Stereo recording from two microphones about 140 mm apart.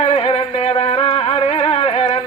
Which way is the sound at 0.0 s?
50° left (ahead or behind).